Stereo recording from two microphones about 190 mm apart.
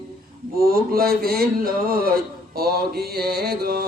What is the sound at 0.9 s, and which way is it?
Speech, 50° right (ahead or behind).